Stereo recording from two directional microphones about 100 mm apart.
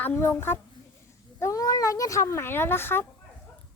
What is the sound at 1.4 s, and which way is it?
A child's voice, 35° left (ahead or behind).